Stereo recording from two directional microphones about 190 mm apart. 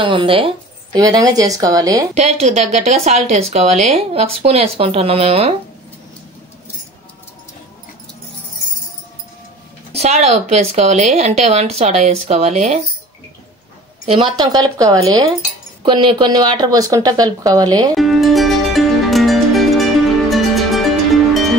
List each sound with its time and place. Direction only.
0.0 s speech: 25° right (ahead or behind)
2.1 s speech: 35° right (ahead or behind)
9.9 s speech: 35° right (ahead or behind)
14.0 s speech: 25° right (ahead or behind)
17.9 s music: centre (ahead or behind)